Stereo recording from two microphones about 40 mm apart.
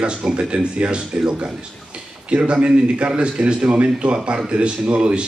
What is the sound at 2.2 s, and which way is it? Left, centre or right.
Speech, right.